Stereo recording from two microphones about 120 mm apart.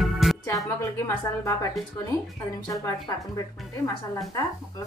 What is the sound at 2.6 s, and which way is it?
Speech, 30° left (ahead or behind).